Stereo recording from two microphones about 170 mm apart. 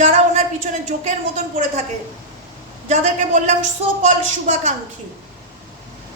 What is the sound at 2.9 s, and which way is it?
Speech, 45° right (ahead or behind).